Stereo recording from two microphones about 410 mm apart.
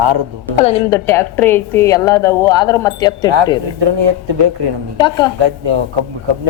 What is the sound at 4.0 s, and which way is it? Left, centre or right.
Speech, right.